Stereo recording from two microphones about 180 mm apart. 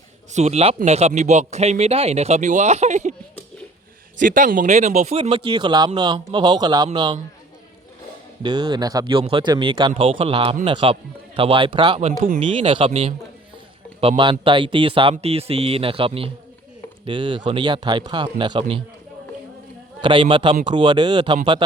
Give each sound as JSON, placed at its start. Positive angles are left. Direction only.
{"t": 0.3, "sound": "speech", "side_deg": -35}
{"t": 4.2, "sound": "speech", "side_deg": -45}
{"t": 8.4, "sound": "speech", "side_deg": -25}
{"t": 20.0, "sound": "speech", "side_deg": -25}